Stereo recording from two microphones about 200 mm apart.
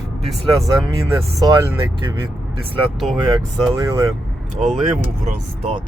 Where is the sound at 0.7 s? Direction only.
15° right (ahead or behind).